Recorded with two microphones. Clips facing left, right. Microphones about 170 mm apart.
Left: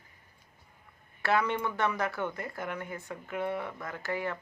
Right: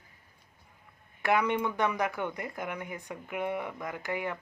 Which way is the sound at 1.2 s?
15° right (ahead or behind).